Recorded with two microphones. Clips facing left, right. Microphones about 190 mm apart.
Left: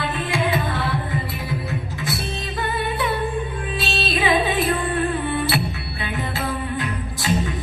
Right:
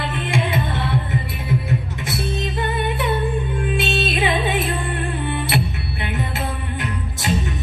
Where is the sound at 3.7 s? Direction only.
25° right (ahead or behind).